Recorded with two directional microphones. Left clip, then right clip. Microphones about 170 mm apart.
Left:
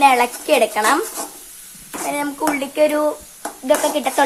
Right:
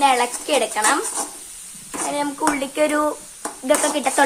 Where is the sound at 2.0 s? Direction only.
15° left (ahead or behind).